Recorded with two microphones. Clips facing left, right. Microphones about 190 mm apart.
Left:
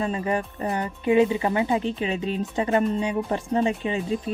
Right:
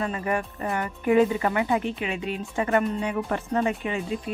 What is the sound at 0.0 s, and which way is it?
Speech, 25° left (ahead or behind).